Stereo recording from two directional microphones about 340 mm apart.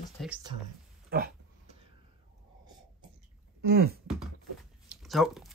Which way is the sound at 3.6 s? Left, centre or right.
Right.